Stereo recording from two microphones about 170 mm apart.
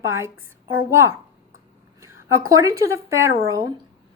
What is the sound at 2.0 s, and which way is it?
Speech, 20° right (ahead or behind).